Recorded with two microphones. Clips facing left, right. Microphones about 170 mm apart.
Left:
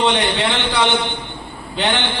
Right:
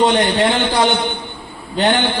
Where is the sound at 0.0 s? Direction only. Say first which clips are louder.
Right 4 dB; 40° right (ahead or behind).